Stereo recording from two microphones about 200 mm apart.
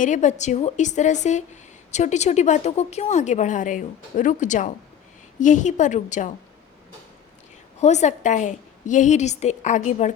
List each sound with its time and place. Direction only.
0.0 s a woman's voice: 35° left (ahead or behind)
7.8 s a woman's voice: 35° left (ahead or behind)